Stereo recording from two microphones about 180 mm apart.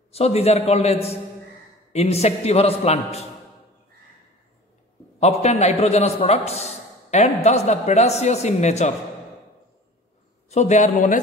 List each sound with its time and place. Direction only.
0.1 s a man's voice: 35° left (ahead or behind)
5.2 s a man's voice: 35° left (ahead or behind)
10.5 s a man's voice: 40° left (ahead or behind)